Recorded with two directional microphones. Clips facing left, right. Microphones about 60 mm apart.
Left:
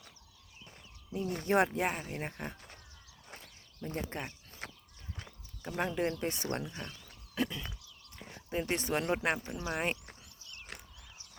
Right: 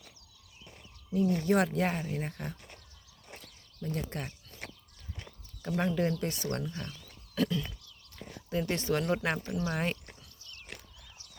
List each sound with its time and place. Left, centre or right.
1.1 s speech: left
3.4 s a sound: left
5.6 s speech: centre